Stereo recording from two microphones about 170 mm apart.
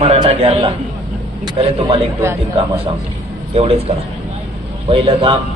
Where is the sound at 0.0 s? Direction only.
35° right (ahead or behind).